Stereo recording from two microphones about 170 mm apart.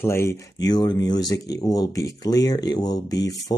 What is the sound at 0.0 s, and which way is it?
Speech, 15° left (ahead or behind).